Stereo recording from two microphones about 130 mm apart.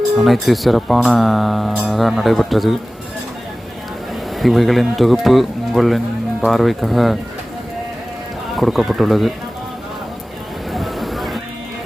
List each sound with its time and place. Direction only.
0.2 s speech: centre (ahead or behind)
4.4 s speech: centre (ahead or behind)
8.5 s speech: centre (ahead or behind)
10.7 s vehicle: centre (ahead or behind)